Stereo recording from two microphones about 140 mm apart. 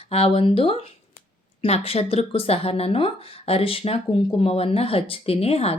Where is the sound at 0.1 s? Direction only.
45° left (ahead or behind).